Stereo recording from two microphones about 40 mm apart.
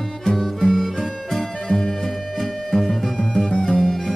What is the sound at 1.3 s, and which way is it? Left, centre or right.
Music, centre.